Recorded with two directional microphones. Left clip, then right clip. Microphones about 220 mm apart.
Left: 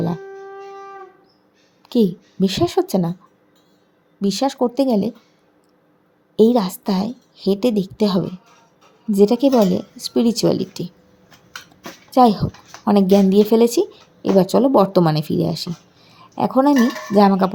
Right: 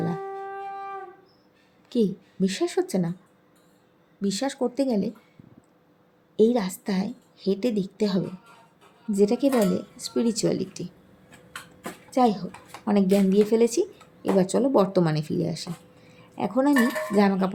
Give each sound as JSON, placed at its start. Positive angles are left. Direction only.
{"t": 1.9, "sound": "a woman's voice", "side_deg": 30}
{"t": 4.2, "sound": "a woman's voice", "side_deg": 25}
{"t": 6.3, "sound": "a woman's voice", "side_deg": 30}
{"t": 12.1, "sound": "a woman's voice", "side_deg": 30}